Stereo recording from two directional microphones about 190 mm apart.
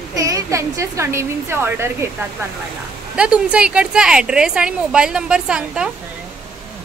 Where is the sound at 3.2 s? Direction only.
5° right (ahead or behind).